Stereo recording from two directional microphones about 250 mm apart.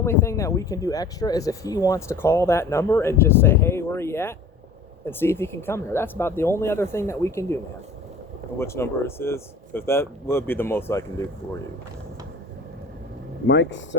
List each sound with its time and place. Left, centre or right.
0.0 s speech: centre
13.5 s speech: left